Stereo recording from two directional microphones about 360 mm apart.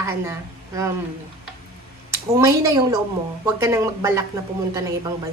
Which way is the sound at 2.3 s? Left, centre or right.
Centre.